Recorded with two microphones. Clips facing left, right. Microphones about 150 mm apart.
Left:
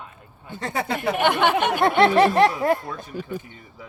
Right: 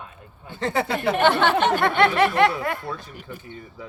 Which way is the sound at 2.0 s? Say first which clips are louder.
Left 3 dB; 35° left (ahead or behind).